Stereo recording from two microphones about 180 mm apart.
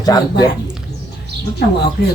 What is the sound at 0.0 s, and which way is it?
Speech, 20° left (ahead or behind).